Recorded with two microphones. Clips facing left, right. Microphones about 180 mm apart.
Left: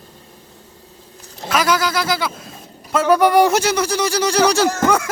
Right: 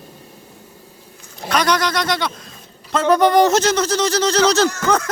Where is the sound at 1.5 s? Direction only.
5° left (ahead or behind).